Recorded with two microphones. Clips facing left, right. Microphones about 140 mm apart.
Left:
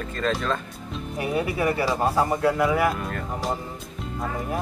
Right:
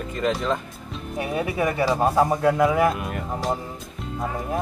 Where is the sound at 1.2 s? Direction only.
25° right (ahead or behind).